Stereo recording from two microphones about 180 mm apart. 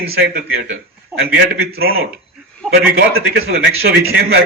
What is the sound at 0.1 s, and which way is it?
Speech, 60° right (ahead or behind).